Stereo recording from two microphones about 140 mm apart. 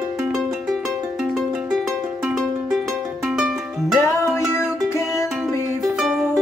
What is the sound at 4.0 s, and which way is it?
Music, 20° left (ahead or behind).